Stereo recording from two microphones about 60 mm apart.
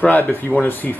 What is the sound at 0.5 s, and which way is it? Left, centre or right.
Speech, right.